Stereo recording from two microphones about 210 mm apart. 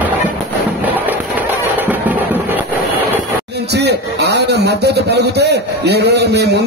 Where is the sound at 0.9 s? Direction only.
10° right (ahead or behind).